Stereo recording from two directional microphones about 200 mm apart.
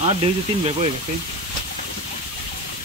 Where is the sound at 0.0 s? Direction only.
25° right (ahead or behind).